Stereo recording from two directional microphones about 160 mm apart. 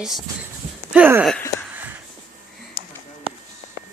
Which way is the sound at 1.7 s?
10° right (ahead or behind).